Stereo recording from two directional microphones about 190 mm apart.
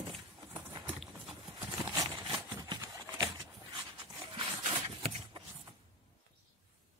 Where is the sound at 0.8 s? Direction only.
Centre (ahead or behind).